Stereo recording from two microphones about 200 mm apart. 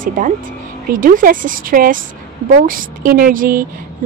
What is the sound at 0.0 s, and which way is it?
Speech, 40° right (ahead or behind).